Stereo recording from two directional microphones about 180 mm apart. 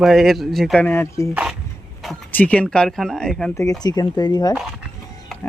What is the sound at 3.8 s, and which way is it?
Speech, 20° left (ahead or behind).